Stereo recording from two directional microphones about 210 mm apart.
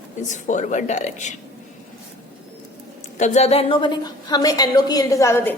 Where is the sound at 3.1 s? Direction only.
35° left (ahead or behind).